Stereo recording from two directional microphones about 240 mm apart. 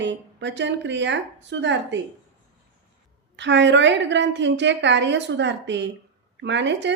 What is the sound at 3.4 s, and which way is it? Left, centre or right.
Speech, right.